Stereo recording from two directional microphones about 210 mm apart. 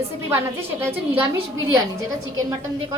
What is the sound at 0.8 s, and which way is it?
Speech, 10° right (ahead or behind).